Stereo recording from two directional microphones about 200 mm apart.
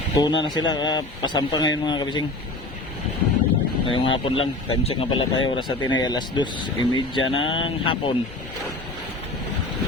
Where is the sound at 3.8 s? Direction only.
25° left (ahead or behind).